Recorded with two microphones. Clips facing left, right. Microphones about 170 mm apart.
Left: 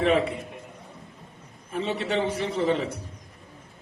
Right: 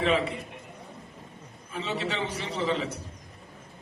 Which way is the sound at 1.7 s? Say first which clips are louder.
Left 5 dB; 55° left (ahead or behind).